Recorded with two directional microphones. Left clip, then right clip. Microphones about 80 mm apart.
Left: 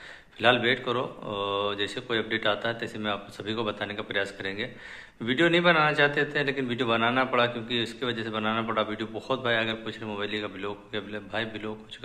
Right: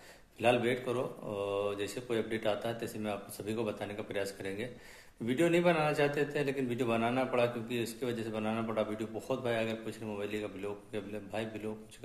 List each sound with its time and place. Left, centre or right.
0.4 s a man's voice: right